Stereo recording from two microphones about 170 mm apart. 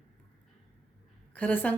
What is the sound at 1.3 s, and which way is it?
Speech, 10° left (ahead or behind).